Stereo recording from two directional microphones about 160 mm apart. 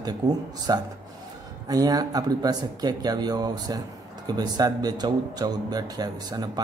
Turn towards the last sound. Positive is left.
turn(degrees=-25)  # may be behind; listen again after turning